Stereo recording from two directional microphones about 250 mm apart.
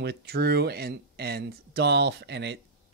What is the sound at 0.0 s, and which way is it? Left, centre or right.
Speech, right.